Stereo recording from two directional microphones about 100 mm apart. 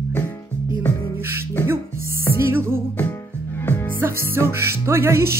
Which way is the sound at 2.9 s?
20° left (ahead or behind).